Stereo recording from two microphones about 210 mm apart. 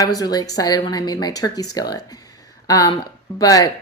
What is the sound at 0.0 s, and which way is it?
Speech, 15° left (ahead or behind).